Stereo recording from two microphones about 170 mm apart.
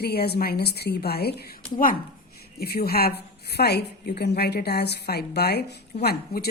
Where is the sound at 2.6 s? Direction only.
65° left (ahead or behind).